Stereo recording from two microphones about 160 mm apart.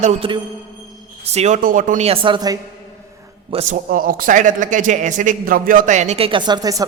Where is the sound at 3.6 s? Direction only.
60° right (ahead or behind).